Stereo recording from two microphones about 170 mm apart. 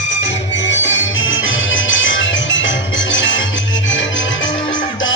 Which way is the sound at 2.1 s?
90° left.